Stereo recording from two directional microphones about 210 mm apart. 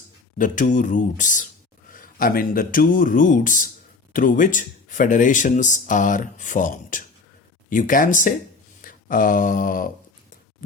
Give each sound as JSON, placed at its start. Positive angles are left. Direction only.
{"t": 0.3, "sound": "speech", "side_deg": 40}